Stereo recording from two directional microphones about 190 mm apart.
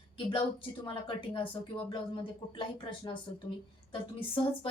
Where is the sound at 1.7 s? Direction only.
30° left (ahead or behind).